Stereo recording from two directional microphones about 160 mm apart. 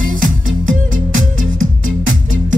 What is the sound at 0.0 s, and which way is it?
Music, 60° right (ahead or behind).